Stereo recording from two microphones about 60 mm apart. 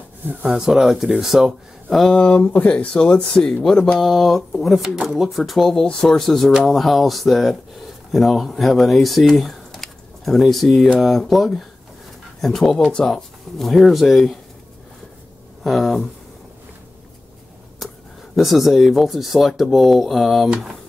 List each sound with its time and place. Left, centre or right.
0.5 s speech: centre
2.1 s speech: left; by 14.4 s centre
15.6 s speech: centre
18.3 s speech: centre